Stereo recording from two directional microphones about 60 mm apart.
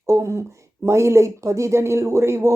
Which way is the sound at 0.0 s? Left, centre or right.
Right.